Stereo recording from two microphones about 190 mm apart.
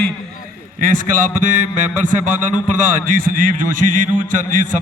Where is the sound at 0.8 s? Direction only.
45° right (ahead or behind).